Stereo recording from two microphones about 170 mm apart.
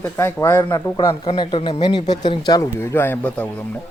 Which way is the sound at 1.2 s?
30° left (ahead or behind).